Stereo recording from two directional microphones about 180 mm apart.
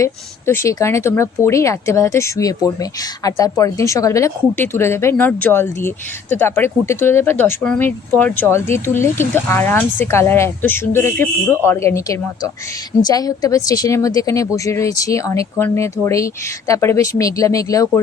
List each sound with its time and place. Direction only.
0.0 s speech: 15° left (ahead or behind)